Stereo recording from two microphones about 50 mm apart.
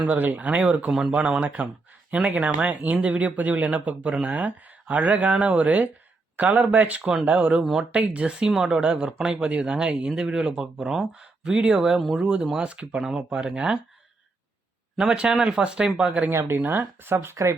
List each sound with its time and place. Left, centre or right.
0.1 s speech: right
0.9 s speech: centre
1.1 s speech: right
14.9 s speech: centre
16.3 s speech: right
16.6 s speech: right